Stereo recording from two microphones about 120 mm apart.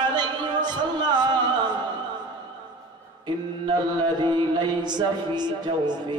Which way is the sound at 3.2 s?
40° right (ahead or behind).